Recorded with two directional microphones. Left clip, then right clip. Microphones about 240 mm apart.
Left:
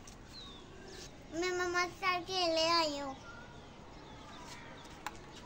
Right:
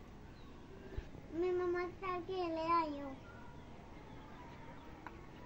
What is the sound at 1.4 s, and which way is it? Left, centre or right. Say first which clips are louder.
Child singing: left 3 dB; left.